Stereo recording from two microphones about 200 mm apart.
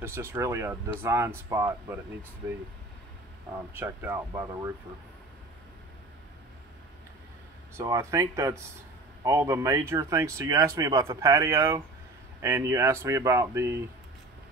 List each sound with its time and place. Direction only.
0.0 s speech: 10° right (ahead or behind)
3.7 s speech: 10° right (ahead or behind)
7.7 s speech: 15° right (ahead or behind)